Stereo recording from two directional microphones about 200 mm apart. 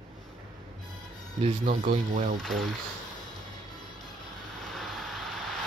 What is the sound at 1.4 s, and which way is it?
Speech, 35° right (ahead or behind).